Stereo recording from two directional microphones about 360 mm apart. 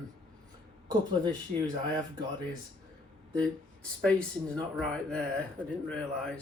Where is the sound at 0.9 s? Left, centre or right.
Centre.